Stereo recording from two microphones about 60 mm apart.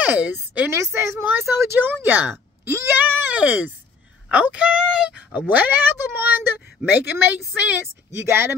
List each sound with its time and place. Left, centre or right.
0.0 s speech: right
0.7 s a woman's voice: right
2.0 s speech: right
2.6 s speech: right
3.0 s a sound: right
3.3 s speech: right
5.3 s speech: right
8.3 s speech: right